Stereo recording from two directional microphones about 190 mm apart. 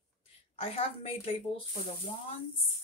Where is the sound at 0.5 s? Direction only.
30° left (ahead or behind).